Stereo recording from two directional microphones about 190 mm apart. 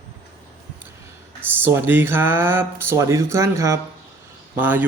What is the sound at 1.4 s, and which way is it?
Speech, 10° right (ahead or behind).